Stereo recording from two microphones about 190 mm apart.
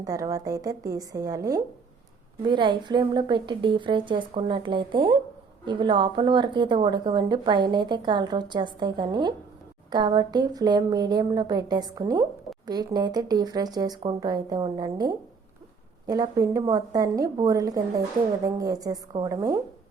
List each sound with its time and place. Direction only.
0.0 s a woman's voice: 20° right (ahead or behind)